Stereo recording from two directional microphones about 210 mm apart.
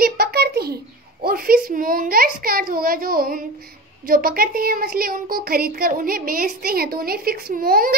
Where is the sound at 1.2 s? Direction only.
45° right (ahead or behind).